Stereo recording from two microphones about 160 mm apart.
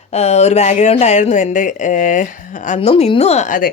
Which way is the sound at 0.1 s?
45° left (ahead or behind).